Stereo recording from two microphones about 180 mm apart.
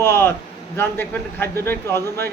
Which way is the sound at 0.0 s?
15° left (ahead or behind).